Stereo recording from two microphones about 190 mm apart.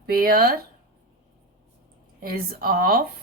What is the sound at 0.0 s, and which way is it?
Speech, 50° right (ahead or behind).